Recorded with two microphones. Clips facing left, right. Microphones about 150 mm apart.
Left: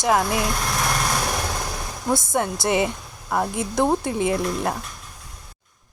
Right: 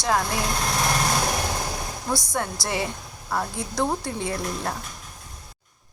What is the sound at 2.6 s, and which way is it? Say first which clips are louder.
Speech: left 7 dB; 20° left (ahead or behind).